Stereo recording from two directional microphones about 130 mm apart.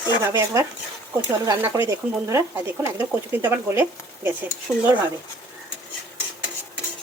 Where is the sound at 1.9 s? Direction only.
25° right (ahead or behind).